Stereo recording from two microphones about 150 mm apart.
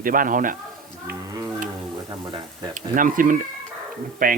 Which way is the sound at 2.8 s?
60° right (ahead or behind).